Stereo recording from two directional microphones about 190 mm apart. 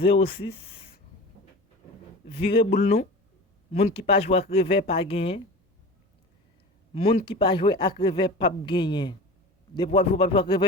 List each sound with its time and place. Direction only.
2.3 s speech: 30° left (ahead or behind)
6.9 s speech: 30° left (ahead or behind)